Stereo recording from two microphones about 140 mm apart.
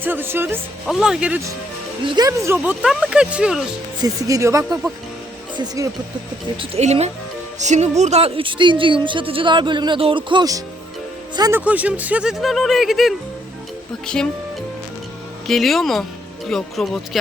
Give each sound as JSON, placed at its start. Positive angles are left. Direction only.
{"t": 0.0, "sound": "speech", "side_deg": -15}
{"t": 0.9, "sound": "speech", "side_deg": 0}
{"t": 2.0, "sound": "speech", "side_deg": -30}
{"t": 2.8, "sound": "speech", "side_deg": -5}
{"t": 4.0, "sound": "speech", "side_deg": -25}
{"t": 6.6, "sound": "speech", "side_deg": -50}
{"t": 11.5, "sound": "speech", "side_deg": -10}
{"t": 14.2, "sound": "speech", "side_deg": 5}
{"t": 15.4, "sound": "speech", "side_deg": 0}